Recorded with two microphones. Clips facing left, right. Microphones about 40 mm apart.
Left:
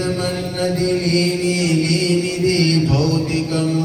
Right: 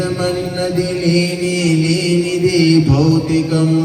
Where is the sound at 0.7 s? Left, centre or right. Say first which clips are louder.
Right 3 dB; right.